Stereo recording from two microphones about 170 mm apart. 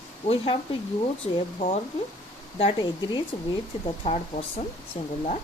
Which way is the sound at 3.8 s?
35° left (ahead or behind).